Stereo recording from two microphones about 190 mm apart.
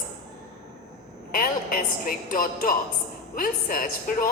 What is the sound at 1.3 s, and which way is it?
A man's voice, 50° left (ahead or behind).